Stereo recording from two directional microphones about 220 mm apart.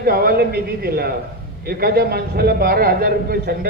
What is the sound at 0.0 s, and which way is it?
A man's voice, 45° right (ahead or behind).